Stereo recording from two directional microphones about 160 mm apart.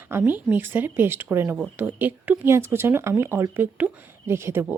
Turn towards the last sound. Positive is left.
turn(degrees=-15)  # may be behind; listen again after turning